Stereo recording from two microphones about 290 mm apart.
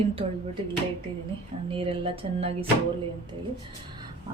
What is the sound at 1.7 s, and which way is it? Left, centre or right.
Speech, centre.